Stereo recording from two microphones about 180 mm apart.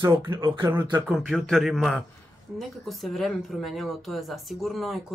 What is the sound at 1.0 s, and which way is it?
Speech, centre (ahead or behind).